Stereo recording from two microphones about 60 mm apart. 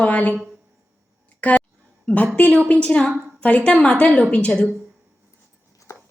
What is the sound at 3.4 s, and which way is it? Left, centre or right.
A woman's voice, left.